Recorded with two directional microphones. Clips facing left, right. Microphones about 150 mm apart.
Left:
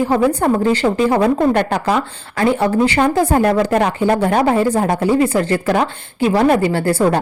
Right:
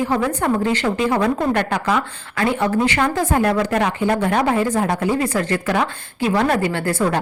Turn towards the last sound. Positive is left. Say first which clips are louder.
# left 4 dB
turn(degrees=30)  # may be behind; listen again after turning